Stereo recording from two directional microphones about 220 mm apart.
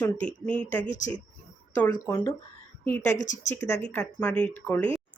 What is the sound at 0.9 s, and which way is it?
Speech, 35° left (ahead or behind).